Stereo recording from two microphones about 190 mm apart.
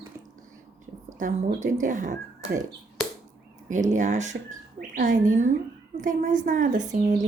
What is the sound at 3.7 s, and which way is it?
A woman's voice, 40° right (ahead or behind).